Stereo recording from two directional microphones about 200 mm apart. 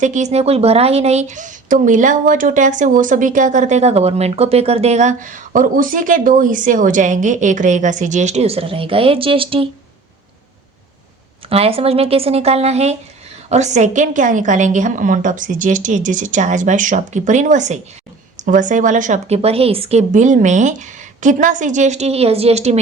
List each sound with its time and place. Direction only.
0.0 s a woman's voice: 35° right (ahead or behind)
11.4 s a woman's voice: 30° right (ahead or behind)